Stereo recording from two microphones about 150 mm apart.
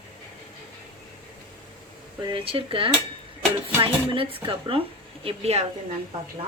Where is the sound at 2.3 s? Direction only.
35° right (ahead or behind).